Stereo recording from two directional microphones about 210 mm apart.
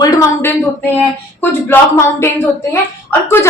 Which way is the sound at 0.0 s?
15° left (ahead or behind).